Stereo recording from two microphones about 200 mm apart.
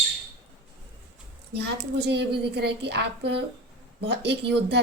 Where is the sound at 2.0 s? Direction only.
55° right (ahead or behind).